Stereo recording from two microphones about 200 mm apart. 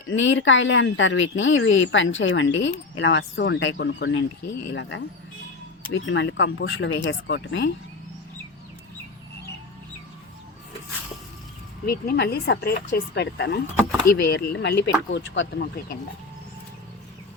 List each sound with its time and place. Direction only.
0.1 s a woman's voice: 70° left (ahead or behind)
11.9 s speech: 55° left (ahead or behind)